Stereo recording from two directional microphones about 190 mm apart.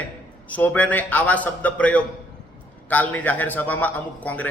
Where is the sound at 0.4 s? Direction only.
10° left (ahead or behind).